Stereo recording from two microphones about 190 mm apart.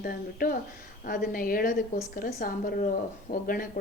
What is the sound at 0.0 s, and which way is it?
A woman's voice, 50° left (ahead or behind).